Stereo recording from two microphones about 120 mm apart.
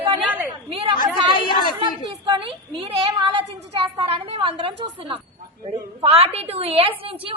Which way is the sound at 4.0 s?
55° right (ahead or behind).